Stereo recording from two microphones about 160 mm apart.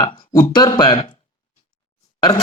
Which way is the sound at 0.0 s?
25° left (ahead or behind).